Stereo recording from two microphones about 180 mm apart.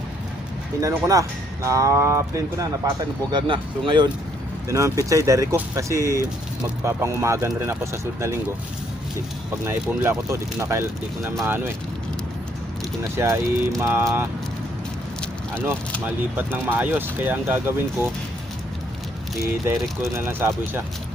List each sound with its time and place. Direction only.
0.8 s speech: 20° right (ahead or behind)
3.3 s speech: 25° right (ahead or behind)
9.6 s speech: 15° right (ahead or behind)
13.0 s speech: 15° right (ahead or behind)
16.0 s speech: 10° right (ahead or behind)
19.6 s speech: 15° right (ahead or behind)